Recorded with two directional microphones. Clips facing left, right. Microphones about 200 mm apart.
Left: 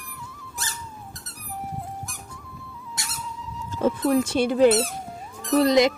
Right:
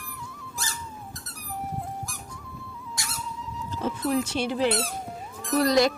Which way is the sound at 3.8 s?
50° left (ahead or behind).